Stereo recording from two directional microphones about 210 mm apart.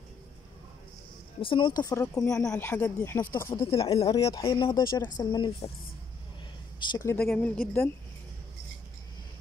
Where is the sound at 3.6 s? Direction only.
25° left (ahead or behind).